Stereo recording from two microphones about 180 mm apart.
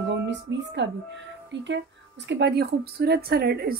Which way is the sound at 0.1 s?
80° right.